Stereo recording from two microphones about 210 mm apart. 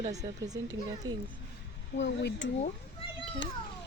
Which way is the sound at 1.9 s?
60° left (ahead or behind).